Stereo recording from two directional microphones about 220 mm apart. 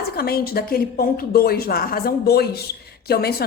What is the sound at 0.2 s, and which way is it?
A woman's voice, 45° left (ahead or behind).